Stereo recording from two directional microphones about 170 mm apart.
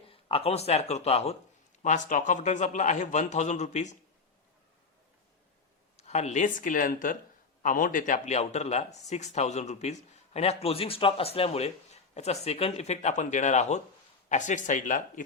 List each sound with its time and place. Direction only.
0.1 s speech: 35° left (ahead or behind)
1.8 s a man's voice: 50° left (ahead or behind)
6.0 s a man's voice: 40° left (ahead or behind)